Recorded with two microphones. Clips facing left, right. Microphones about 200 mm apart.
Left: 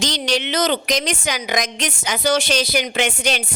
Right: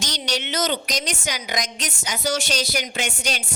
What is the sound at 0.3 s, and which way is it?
Speech, 90° left.